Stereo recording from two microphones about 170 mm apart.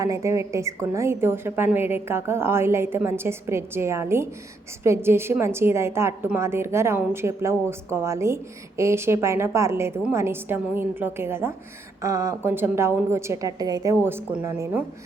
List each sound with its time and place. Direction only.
0.0 s a woman's voice: 20° right (ahead or behind)